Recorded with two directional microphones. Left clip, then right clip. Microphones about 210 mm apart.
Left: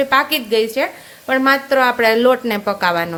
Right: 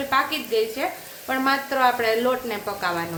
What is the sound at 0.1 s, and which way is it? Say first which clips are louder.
A woman's voice: left 7 dB; 50° left (ahead or behind).